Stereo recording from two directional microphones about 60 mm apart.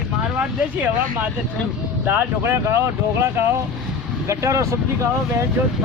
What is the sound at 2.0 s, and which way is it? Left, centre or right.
Speech, right.